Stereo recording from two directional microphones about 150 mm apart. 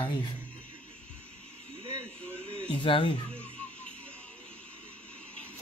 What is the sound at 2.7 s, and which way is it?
Speech, 35° left (ahead or behind).